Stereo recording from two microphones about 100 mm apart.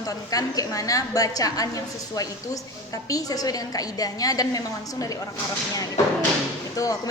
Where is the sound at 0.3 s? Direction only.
35° left (ahead or behind).